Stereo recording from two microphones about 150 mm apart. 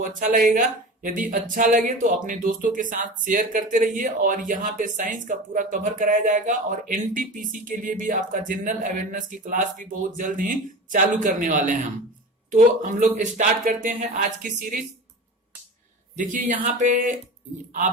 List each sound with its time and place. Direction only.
0.0 s speech: 60° right (ahead or behind)
16.1 s speech: 60° right (ahead or behind)